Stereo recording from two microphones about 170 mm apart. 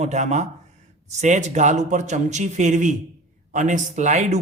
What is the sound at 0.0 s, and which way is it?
Speech, 45° right (ahead or behind).